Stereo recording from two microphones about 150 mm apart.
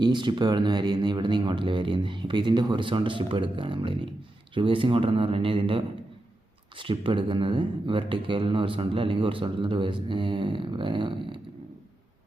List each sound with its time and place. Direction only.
0.0 s speech: 30° right (ahead or behind)